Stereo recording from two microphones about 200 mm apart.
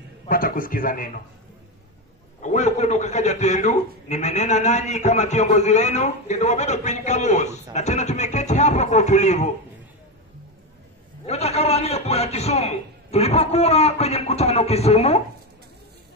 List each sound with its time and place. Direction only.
0.3 s a man's voice: 45° left (ahead or behind)
2.4 s a man's voice: 35° left (ahead or behind)
11.2 s a man's voice: 30° left (ahead or behind)